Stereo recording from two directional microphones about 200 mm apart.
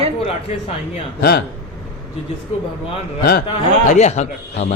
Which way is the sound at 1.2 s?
50° left (ahead or behind).